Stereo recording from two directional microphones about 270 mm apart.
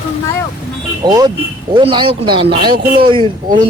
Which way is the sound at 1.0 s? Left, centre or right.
Centre.